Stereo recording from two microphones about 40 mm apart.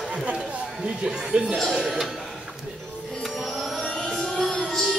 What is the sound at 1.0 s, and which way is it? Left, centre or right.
Music, right.